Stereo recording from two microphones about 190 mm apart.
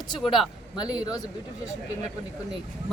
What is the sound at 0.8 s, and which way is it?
Speech, 20° left (ahead or behind).